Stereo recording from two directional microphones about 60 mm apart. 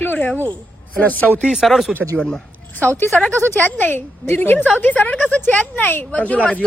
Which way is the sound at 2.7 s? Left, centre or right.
Left.